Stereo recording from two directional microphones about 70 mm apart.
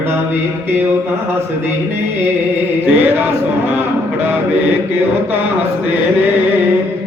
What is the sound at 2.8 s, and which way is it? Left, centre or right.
Chant, right.